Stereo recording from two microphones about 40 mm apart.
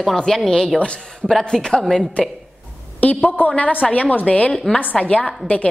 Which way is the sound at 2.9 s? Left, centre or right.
Left.